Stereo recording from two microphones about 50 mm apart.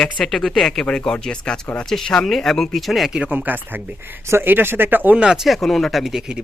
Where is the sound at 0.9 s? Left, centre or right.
Centre.